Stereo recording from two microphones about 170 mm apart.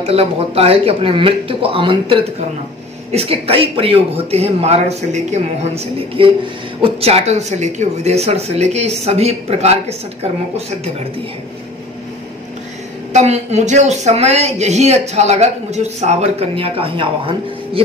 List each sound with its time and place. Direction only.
0.0 s speech: 35° right (ahead or behind)
13.1 s speech: 40° right (ahead or behind)